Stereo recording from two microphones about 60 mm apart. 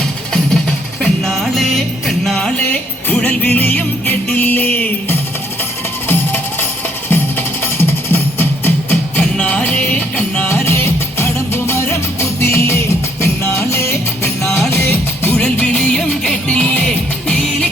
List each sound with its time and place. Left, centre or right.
1.0 s music: centre
3.2 s music: left
9.1 s music: left
10.5 s music: left
15.5 s music: left